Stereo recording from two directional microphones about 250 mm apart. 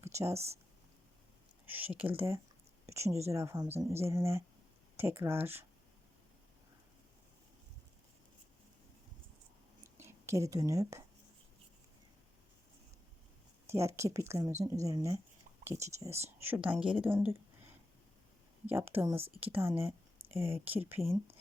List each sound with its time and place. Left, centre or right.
0.3 s speech: right
1.6 s a sound: centre
2.0 s speech: centre
10.0 s a woman's voice: centre
13.7 s speech: centre
18.6 s speech: centre